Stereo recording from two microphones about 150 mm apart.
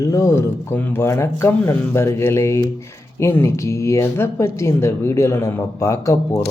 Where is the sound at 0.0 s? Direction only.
20° left (ahead or behind).